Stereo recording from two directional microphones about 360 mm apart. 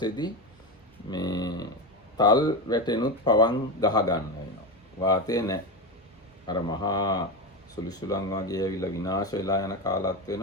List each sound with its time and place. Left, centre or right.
1.1 s speech: centre